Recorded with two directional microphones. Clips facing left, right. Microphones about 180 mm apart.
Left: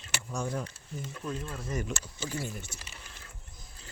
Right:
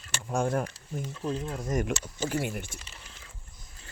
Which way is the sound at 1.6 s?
45° right (ahead or behind).